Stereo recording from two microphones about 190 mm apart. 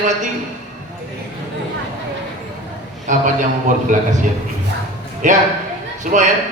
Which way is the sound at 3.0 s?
40° right (ahead or behind).